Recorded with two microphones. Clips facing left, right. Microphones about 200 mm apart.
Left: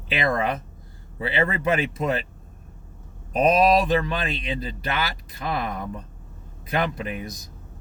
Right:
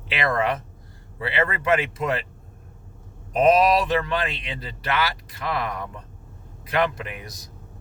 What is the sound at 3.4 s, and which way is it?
Speech, 20° left (ahead or behind).